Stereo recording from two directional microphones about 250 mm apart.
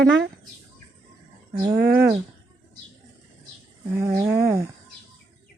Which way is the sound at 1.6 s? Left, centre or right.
Centre.